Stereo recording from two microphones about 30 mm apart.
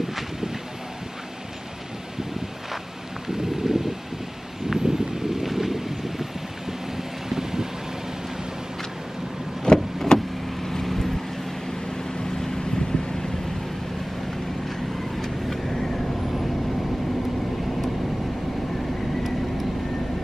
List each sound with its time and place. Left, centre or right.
0.0 s vehicle: centre
3.3 s a sound: centre
4.6 s vehicle: centre
7.2 s vehicle: centre
9.7 s vehicle: left
10.1 s vehicle: centre
12.1 s vehicle: left
15.1 s vehicle: centre